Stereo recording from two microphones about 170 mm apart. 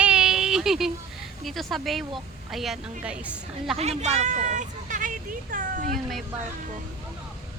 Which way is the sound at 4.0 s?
40° right (ahead or behind).